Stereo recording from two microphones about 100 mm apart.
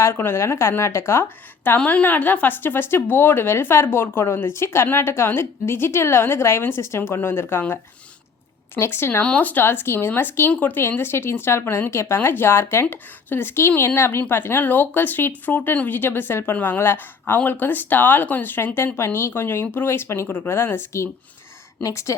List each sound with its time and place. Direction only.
0.0 s a woman's voice: 25° left (ahead or behind)